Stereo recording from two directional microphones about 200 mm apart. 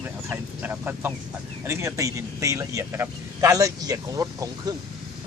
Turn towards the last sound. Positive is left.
turn(degrees=-15)  # may be behind; listen again after turning